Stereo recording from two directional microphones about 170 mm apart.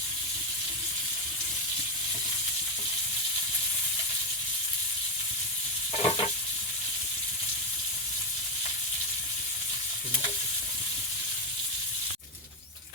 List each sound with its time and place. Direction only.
6.0 s sizzle: 30° left (ahead or behind)